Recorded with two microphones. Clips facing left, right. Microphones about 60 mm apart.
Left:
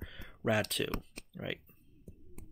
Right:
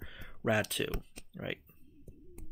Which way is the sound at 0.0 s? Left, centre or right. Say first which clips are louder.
Even; centre.